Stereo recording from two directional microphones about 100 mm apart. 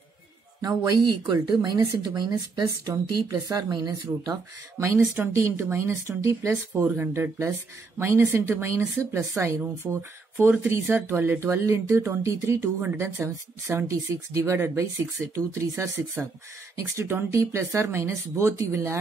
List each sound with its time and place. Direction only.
0.6 s speech: 45° right (ahead or behind)
4.7 s speech: 25° right (ahead or behind)